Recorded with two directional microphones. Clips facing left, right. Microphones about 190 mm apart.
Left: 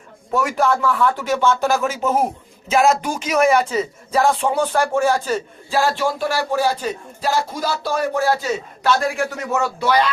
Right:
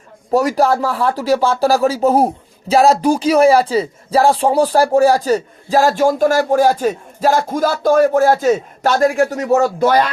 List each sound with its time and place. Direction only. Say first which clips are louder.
0.3 s speech: right 5 dB; 35° right (ahead or behind)